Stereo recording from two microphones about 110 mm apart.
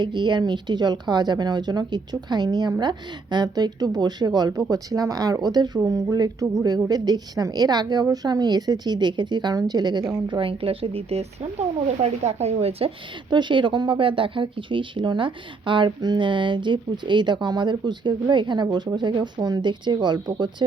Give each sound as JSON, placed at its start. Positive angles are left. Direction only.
{"t": 0.0, "sound": "a woman's voice", "side_deg": -45}
{"t": 12.0, "sound": "speech", "side_deg": -85}
{"t": 13.3, "sound": "speech", "side_deg": -45}